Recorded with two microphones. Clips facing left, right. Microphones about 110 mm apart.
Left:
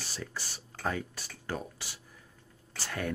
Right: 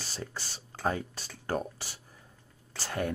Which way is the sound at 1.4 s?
45° right (ahead or behind).